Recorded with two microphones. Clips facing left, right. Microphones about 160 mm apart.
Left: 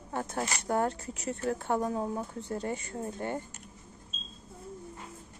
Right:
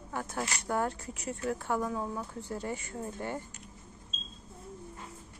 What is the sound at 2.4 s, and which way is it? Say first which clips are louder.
Speech: left 2 dB; 20° left (ahead or behind).